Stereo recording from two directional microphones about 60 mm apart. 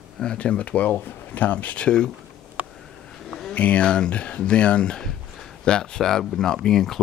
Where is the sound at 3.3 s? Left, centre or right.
Centre.